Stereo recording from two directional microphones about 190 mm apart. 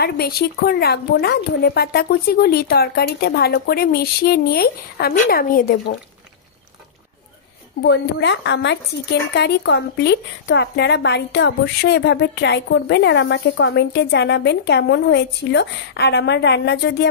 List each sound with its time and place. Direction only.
0.0 s a woman's voice: 55° left (ahead or behind)
7.8 s a woman's voice: 65° left (ahead or behind)